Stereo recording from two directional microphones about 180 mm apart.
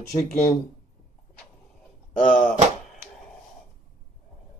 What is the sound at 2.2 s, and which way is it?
Speech, 5° left (ahead or behind).